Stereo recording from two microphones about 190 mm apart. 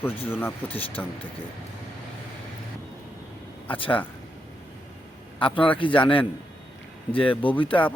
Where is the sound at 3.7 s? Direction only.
25° left (ahead or behind).